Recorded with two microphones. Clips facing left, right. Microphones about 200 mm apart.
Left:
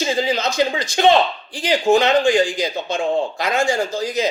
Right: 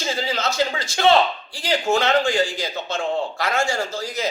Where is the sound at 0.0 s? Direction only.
15° left (ahead or behind).